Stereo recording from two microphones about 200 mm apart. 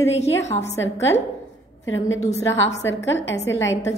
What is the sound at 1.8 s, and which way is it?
Speech, 75° left (ahead or behind).